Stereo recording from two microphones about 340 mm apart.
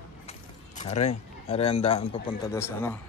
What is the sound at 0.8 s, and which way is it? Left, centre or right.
Speech, centre.